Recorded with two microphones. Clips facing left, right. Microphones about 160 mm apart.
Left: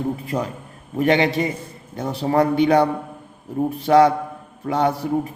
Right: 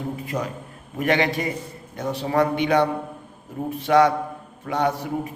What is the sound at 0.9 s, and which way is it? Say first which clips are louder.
A man's voice: left 4 dB; 25° left (ahead or behind).